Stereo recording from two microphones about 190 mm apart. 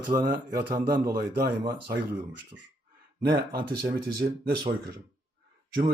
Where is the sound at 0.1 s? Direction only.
20° right (ahead or behind).